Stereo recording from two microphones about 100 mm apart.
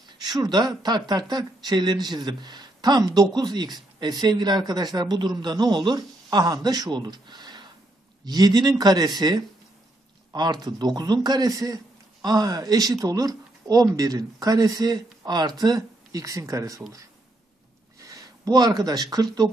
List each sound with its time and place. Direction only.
0.2 s a man's voice: 45° right (ahead or behind)
17.9 s speech: 35° right (ahead or behind)